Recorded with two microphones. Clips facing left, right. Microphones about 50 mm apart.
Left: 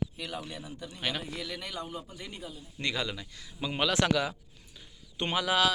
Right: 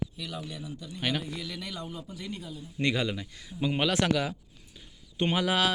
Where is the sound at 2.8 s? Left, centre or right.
Centre.